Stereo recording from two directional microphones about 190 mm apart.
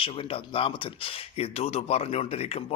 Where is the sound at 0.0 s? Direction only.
30° left (ahead or behind).